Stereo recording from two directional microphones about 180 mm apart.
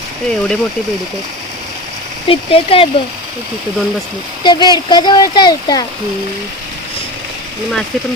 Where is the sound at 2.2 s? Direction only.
30° left (ahead or behind).